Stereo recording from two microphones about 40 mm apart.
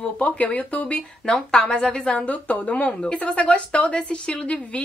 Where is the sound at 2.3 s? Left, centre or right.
Left.